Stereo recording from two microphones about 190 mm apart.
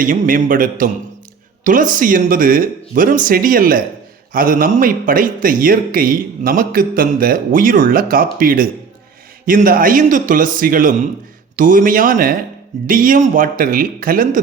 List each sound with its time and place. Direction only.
0.0 s a man's voice: 45° right (ahead or behind)